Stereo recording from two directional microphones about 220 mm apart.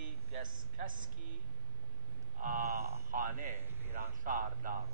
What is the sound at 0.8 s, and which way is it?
Speech, 40° right (ahead or behind).